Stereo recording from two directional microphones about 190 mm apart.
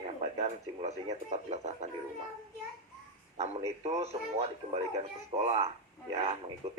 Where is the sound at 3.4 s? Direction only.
35° right (ahead or behind).